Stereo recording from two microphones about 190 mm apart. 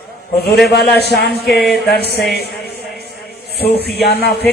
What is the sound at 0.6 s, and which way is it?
Speech, 60° left (ahead or behind).